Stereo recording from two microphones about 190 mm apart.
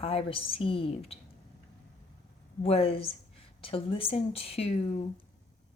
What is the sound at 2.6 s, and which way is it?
A woman's voice, 30° left (ahead or behind).